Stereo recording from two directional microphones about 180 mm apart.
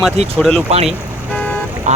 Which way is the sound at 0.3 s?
5° left (ahead or behind).